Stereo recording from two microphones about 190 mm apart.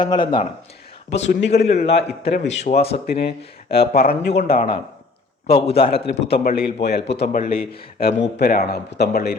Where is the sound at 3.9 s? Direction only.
55° left (ahead or behind).